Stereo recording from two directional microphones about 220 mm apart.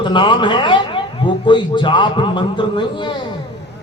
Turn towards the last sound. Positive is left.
turn(degrees=20)  # may be behind; listen again after turning